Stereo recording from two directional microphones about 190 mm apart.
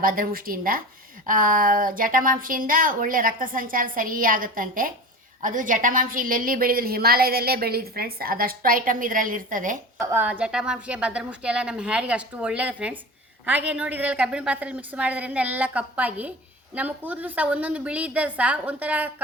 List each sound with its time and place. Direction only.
0.0 s a woman's voice: 50° right (ahead or behind)
10.0 s a woman's voice: 10° right (ahead or behind)